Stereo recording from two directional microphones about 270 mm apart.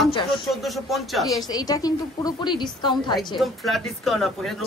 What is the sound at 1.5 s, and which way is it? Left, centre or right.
A woman's voice, centre.